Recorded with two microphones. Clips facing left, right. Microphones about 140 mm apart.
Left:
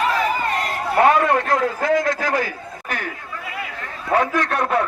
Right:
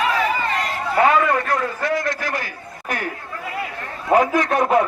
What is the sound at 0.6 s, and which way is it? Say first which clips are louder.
Run: even; 55° left (ahead or behind).